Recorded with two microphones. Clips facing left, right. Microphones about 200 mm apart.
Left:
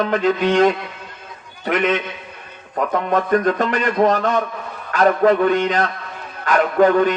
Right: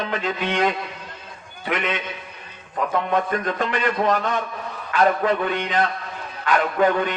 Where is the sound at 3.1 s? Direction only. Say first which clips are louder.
Left 6 dB; 45° left (ahead or behind).